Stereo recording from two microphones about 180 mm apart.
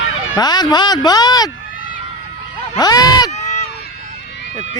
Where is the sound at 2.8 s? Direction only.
20° left (ahead or behind).